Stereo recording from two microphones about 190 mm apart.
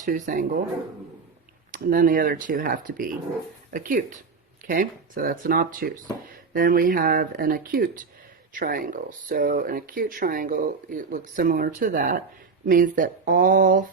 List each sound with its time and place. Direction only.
0.0 s speech: 45° right (ahead or behind)
1.7 s speech: 45° right (ahead or behind)